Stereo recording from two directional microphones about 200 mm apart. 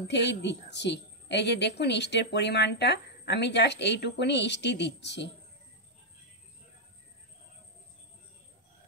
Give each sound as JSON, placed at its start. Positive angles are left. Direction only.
{"t": 0.1, "sound": "a woman's voice", "side_deg": 60}